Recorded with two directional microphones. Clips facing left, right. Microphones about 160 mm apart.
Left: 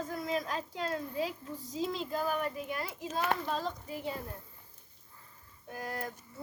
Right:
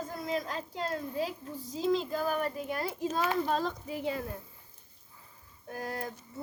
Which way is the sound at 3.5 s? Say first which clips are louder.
Right 4 dB; 80° right.